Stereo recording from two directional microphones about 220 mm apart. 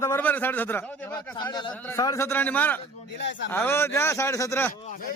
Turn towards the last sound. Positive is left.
turn(degrees=10)  # may be behind; listen again after turning